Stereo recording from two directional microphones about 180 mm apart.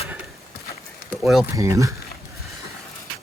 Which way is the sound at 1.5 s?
20° right (ahead or behind).